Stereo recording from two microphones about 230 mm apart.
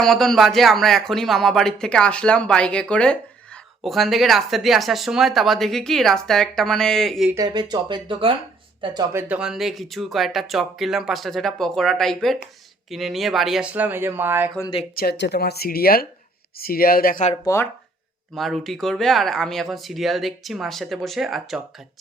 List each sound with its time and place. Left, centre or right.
0.0 s speech: centre
7.3 s speech: centre
9.2 s speech: centre
14.9 s speech: left
17.4 s speech: centre
18.3 s speech: centre